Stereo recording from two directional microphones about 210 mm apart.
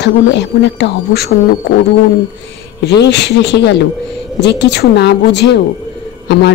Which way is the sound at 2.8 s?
55° left (ahead or behind).